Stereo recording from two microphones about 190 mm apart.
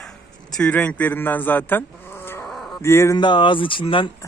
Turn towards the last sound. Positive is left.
turn(degrees=25)  # may be behind; listen again after turning